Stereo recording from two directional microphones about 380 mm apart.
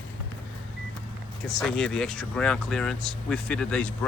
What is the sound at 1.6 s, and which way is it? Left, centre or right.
Speech, centre.